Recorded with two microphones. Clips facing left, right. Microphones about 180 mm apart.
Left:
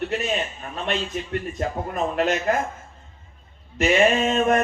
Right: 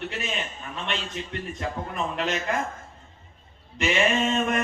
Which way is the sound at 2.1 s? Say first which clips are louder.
Left 7 dB; 45° left (ahead or behind).